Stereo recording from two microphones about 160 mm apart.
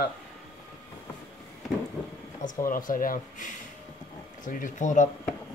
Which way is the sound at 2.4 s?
60° left (ahead or behind).